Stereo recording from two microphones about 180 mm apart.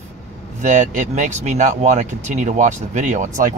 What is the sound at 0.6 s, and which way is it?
Speech, 45° right (ahead or behind).